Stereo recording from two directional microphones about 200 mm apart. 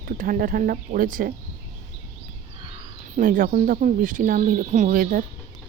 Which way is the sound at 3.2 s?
45° right (ahead or behind).